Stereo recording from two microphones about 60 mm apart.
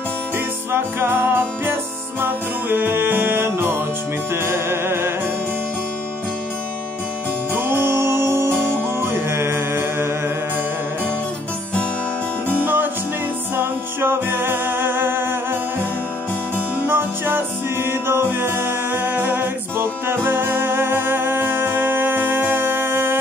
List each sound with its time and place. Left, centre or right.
0.7 s music: right
7.5 s music: right
12.6 s music: right
16.8 s music: right